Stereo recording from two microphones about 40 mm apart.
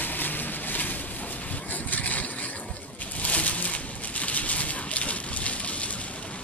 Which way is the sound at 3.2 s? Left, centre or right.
Left.